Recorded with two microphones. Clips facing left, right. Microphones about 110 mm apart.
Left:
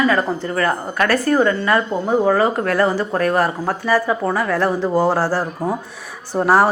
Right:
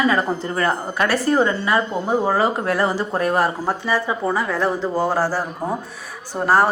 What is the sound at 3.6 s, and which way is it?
A woman's voice, 5° right (ahead or behind).